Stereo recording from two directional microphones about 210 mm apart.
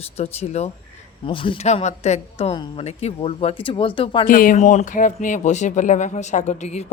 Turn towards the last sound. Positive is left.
turn(degrees=35)  # may be behind; listen again after turning